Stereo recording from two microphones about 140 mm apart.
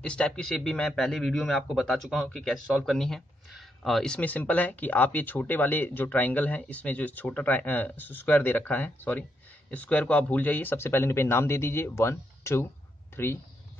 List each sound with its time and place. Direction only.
0.0 s speech: 5° left (ahead or behind)